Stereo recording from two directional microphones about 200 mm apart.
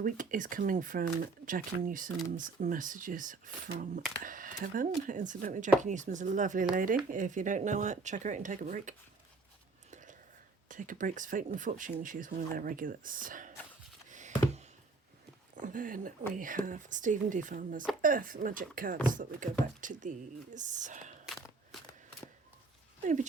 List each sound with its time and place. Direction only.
0.0 s speech: 40° right (ahead or behind)
9.9 s whispering: 40° right (ahead or behind)
10.7 s speech: 40° right (ahead or behind)
14.1 s a sound: 35° right (ahead or behind)
15.5 s speech: 40° right (ahead or behind)
21.2 s a sound: centre (ahead or behind)